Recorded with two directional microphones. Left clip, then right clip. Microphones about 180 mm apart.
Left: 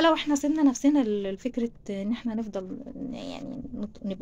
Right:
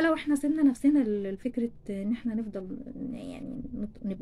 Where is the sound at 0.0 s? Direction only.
20° right (ahead or behind).